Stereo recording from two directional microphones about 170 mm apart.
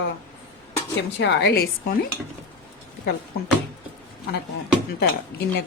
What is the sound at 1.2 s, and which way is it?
Speech, 90° left.